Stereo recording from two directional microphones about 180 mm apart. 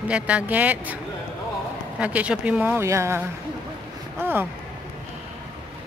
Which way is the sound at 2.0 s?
5° right (ahead or behind).